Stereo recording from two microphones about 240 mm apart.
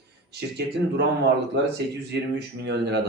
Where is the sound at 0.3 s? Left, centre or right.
Right.